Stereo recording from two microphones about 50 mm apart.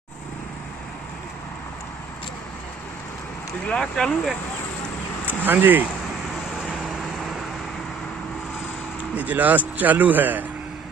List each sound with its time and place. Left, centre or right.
3.6 s speech: centre
5.2 s speech: right
6.6 s vehicle: centre
9.1 s speech: right